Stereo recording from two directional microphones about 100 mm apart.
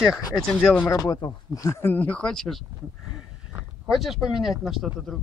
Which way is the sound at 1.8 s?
20° left (ahead or behind).